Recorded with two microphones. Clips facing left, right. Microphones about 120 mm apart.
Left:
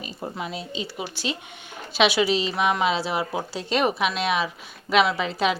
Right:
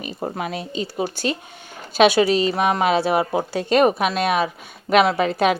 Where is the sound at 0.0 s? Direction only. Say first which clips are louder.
Right 5 dB; 60° right (ahead or behind).